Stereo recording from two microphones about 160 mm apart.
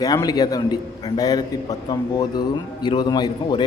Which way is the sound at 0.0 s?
25° left (ahead or behind).